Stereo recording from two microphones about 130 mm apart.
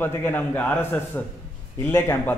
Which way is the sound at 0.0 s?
15° left (ahead or behind).